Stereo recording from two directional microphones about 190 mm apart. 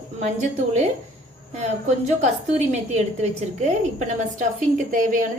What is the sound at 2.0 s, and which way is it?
A woman's voice, 35° right (ahead or behind).